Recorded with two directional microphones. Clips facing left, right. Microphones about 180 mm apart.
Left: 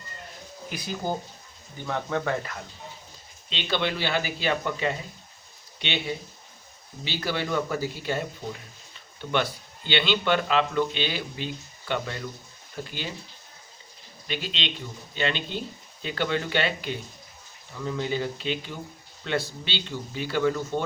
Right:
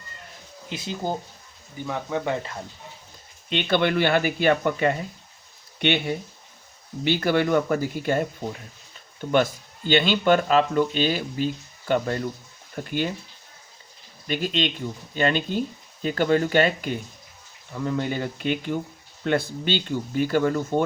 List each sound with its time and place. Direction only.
0.7 s speech: 25° right (ahead or behind)
1.9 s speech: 10° right (ahead or behind)
3.5 s speech: 55° right (ahead or behind)
9.3 s speech: 45° right (ahead or behind)
14.3 s speech: 45° right (ahead or behind)